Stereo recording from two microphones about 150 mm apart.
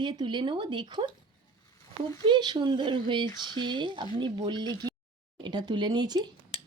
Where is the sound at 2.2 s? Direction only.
30° right (ahead or behind).